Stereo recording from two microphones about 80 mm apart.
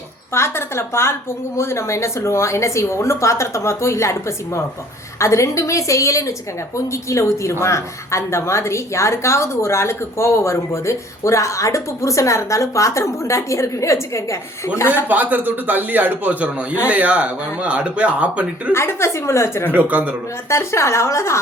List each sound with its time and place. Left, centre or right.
0.3 s a woman's voice: left
15.1 s a man's voice: right
18.7 s a woman's voice: left
19.7 s a man's voice: right
20.5 s a woman's voice: left